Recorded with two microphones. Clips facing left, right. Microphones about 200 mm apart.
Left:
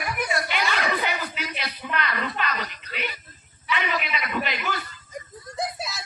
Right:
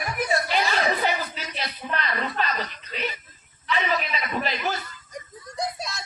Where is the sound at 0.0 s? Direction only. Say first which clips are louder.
Right 2 dB; 35° right (ahead or behind).